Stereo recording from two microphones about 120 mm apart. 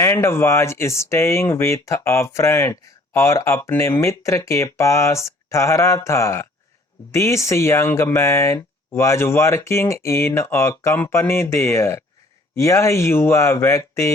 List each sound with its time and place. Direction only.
0.0 s speech: 20° left (ahead or behind)